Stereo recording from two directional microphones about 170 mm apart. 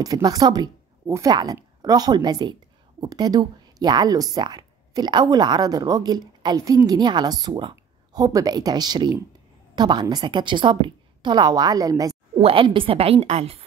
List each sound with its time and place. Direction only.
0.0 s a woman's voice: 20° right (ahead or behind)
12.4 s a woman's voice: 35° right (ahead or behind)